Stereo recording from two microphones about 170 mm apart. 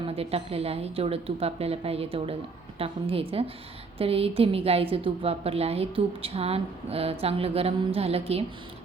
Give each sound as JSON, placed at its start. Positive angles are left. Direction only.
{"t": 0.1, "sound": "a woman's voice", "side_deg": -35}